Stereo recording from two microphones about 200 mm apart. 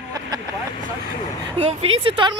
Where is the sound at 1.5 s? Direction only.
30° right (ahead or behind).